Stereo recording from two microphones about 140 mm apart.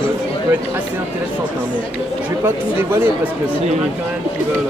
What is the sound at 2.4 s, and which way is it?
Speech, 15° right (ahead or behind).